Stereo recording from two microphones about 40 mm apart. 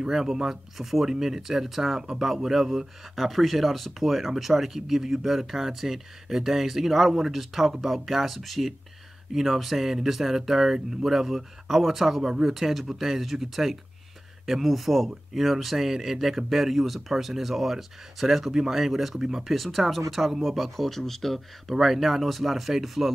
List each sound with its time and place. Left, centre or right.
0.1 s speech: centre
18.5 s speech: centre
18.8 s speech: centre
19.4 s speech: centre